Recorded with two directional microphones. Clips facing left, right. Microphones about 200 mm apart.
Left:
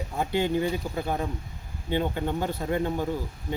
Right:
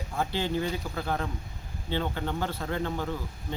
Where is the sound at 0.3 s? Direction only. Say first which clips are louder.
Left 6 dB; 15° left (ahead or behind).